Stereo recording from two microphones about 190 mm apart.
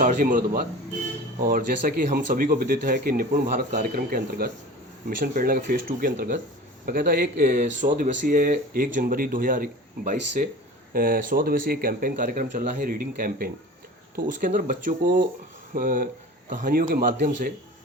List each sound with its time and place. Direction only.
0.0 s speech: 45° right (ahead or behind)